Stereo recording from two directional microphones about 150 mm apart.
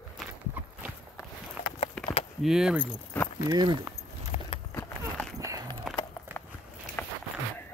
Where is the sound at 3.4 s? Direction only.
25° right (ahead or behind).